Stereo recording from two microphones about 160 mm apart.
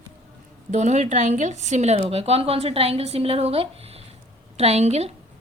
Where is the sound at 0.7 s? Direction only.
45° right (ahead or behind).